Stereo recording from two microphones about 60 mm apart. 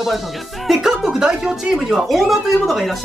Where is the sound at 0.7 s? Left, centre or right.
Centre.